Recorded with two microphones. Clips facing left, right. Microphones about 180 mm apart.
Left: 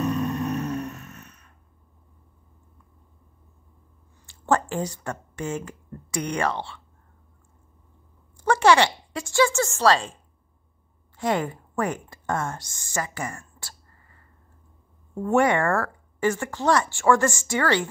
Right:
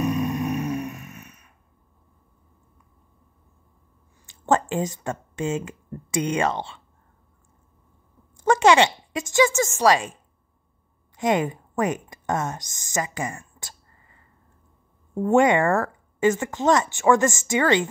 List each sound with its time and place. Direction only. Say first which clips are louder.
0.0 s a sound: right 1 dB; 15° right (ahead or behind)
4.3 s speech: right 2 dB; 20° right (ahead or behind)
8.5 s speech: right 2 dB; 20° right (ahead or behind)
11.1 s a woman's voice: right 3 dB; 20° right (ahead or behind)